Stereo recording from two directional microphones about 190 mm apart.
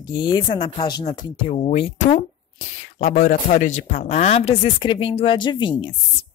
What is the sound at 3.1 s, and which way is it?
Speech, 45° left (ahead or behind).